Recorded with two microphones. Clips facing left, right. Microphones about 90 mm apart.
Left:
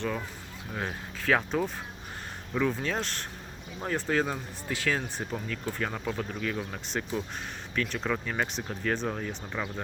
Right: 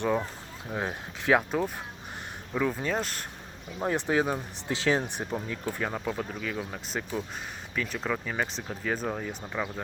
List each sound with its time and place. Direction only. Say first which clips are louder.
0.0 s speech: right 5 dB; 20° right (ahead or behind); by 3.2 s 5° right (ahead or behind)
3.8 s speech: right 2 dB; 20° right (ahead or behind); by 9.8 s 5° right (ahead or behind)